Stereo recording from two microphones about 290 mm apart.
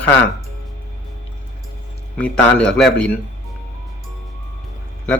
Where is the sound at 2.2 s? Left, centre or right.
Centre.